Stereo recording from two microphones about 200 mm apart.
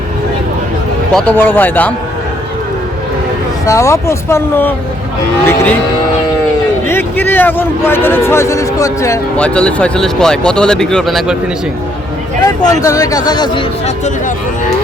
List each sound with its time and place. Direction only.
1.1 s speech: 10° left (ahead or behind)
3.7 s speech: 15° left (ahead or behind)
6.8 s speech: 10° left (ahead or behind)
12.4 s speech: 20° left (ahead or behind); by 14.7 s 40° left (ahead or behind)